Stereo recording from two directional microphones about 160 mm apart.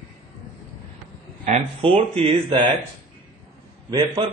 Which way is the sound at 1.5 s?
40° right (ahead or behind).